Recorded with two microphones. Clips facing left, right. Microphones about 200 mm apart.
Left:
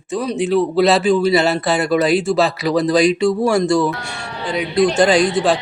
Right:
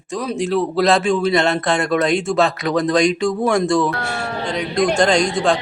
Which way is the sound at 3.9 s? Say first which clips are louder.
Right 5 dB; 60° right (ahead or behind).